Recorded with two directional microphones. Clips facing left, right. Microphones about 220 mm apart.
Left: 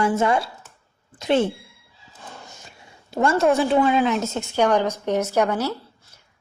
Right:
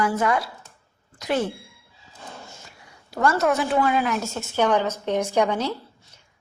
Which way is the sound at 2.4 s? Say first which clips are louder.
Even; 20° left (ahead or behind).